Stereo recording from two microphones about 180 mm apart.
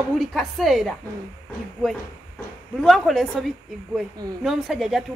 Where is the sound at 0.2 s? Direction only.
Centre (ahead or behind).